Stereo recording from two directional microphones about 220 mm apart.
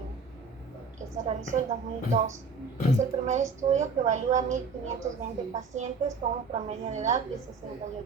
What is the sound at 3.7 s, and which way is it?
Speech, 35° right (ahead or behind).